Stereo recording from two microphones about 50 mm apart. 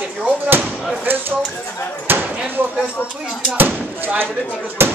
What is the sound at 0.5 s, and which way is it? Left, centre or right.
Slam, right.